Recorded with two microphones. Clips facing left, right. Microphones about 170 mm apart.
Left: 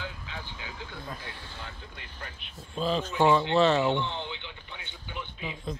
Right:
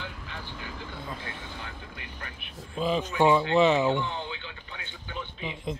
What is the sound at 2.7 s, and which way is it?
Speech, 15° right (ahead or behind).